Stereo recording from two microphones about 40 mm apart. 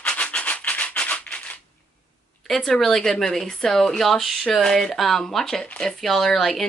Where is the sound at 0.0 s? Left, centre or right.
Left.